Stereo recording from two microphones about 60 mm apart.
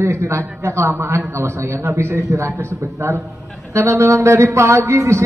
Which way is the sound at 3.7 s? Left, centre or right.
Right.